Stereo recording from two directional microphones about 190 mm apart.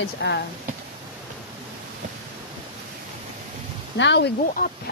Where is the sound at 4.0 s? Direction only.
70° left (ahead or behind).